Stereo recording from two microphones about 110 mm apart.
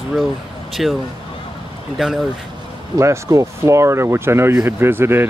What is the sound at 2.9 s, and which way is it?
Speech, 25° right (ahead or behind).